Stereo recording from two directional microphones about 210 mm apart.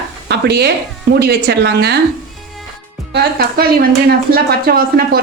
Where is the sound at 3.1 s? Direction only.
45° right (ahead or behind).